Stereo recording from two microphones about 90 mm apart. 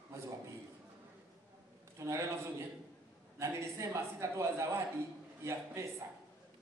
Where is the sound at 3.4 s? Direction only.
35° right (ahead or behind).